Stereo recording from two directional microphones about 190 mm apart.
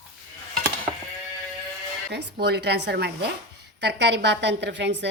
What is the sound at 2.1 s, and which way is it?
A woman's voice, 60° right (ahead or behind).